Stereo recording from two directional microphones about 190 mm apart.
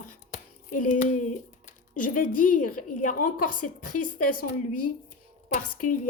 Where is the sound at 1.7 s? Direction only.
45° left (ahead or behind).